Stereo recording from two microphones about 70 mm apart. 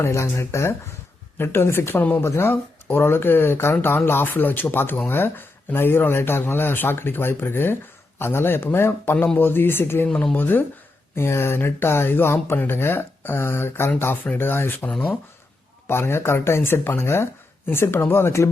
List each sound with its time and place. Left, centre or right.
0.0 s speech: left
15.9 s speech: left